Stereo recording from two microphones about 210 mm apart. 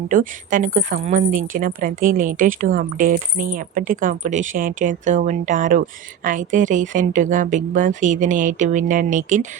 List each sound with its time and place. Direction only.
0.1 s a woman's voice: 40° right (ahead or behind)